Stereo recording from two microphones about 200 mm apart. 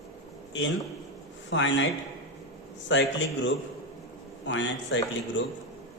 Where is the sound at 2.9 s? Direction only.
65° left (ahead or behind).